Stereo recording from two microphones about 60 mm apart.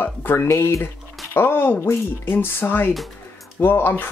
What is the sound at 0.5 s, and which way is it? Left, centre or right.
Speech, left.